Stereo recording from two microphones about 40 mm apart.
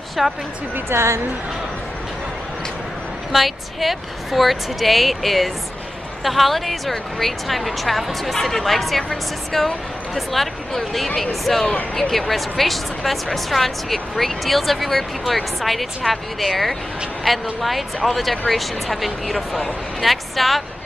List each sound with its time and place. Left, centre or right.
0.2 s a woman's voice: centre
0.9 s a woman's voice: right
3.3 s a woman's voice: centre